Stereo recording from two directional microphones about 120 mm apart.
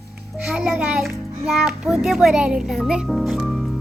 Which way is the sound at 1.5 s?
Centre (ahead or behind).